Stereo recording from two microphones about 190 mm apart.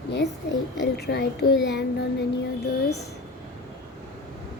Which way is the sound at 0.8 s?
60° left (ahead or behind).